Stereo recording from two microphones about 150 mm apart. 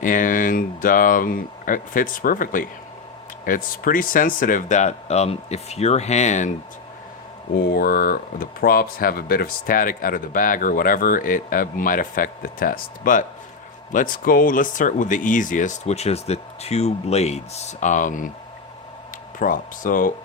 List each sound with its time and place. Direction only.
0.0 s speech: 65° left (ahead or behind)
7.7 s speech: 85° left; by 18.3 s 60° left (ahead or behind)
19.4 s speech: 65° left (ahead or behind)